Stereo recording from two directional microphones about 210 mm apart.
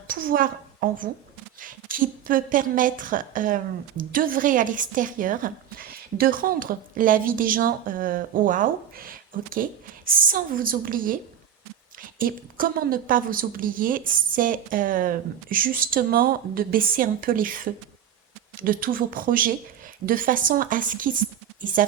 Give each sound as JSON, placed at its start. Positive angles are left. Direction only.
{"t": 0.1, "sound": "a woman's voice", "side_deg": -45}